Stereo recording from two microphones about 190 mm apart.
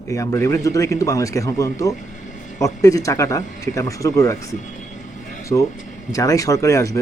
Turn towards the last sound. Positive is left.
turn(degrees=15)  # may be behind; listen again after turning